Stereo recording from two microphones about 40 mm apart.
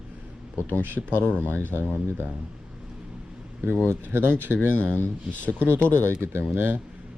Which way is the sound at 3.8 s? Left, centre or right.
Right.